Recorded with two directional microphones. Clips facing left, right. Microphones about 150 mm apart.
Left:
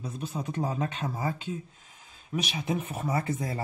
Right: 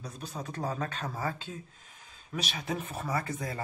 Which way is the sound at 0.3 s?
20° left (ahead or behind).